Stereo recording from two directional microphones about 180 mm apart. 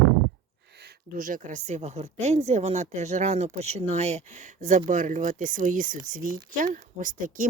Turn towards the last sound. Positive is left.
turn(degrees=-45)  # may be behind; listen again after turning